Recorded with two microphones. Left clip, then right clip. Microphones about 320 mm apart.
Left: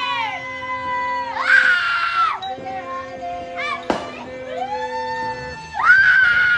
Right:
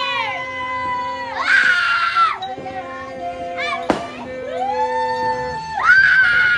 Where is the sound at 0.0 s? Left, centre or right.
Centre.